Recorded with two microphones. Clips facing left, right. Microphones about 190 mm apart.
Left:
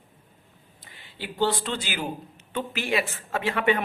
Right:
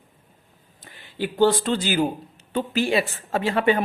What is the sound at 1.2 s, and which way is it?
Speech, 45° right (ahead or behind).